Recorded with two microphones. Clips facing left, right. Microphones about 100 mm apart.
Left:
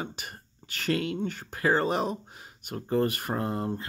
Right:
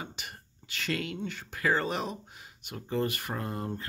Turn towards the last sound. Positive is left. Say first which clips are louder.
# left 5 dB
turn(degrees=30)  # may be behind; listen again after turning